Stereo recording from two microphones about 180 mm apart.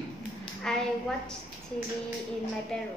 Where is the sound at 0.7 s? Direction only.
5° left (ahead or behind).